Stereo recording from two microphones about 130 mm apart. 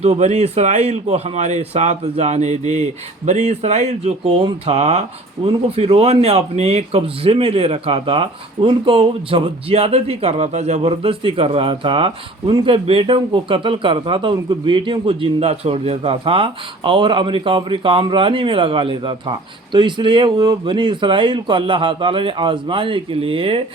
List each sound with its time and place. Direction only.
0.0 s speech: 60° right (ahead or behind)